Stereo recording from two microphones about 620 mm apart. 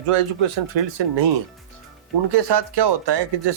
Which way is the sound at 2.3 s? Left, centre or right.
Right.